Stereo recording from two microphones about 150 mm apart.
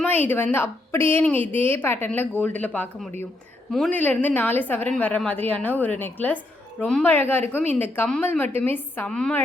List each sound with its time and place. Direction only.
0.0 s a woman's voice: 10° left (ahead or behind)